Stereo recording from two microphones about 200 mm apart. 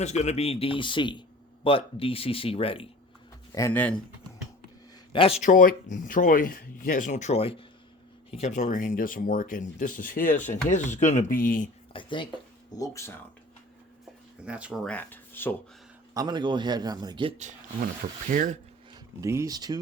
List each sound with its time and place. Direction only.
0.0 s speech: 35° left (ahead or behind)
3.5 s speech: 10° left (ahead or behind)
5.1 s speech: 30° left (ahead or behind); by 11.7 s 45° left (ahead or behind)
11.9 s speech: 25° left (ahead or behind)
14.4 s speech: 5° right (ahead or behind); by 15.5 s 10° left (ahead or behind)
16.1 s a man's voice: 20° right (ahead or behind)
18.3 s speech: 45° right (ahead or behind)
19.2 s a man's voice: 15° right (ahead or behind)